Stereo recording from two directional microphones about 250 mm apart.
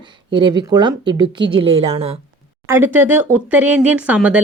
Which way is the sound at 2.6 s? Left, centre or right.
Centre.